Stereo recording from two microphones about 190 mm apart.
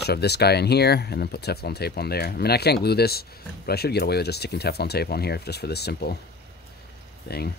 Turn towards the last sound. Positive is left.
turn(degrees=55)  # may be behind; listen again after turning